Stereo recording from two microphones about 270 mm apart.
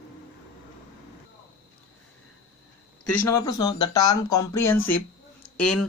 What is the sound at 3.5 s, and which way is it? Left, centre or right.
Speech, centre.